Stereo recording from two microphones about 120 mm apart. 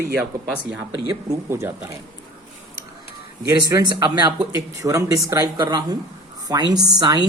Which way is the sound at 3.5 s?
30° right (ahead or behind).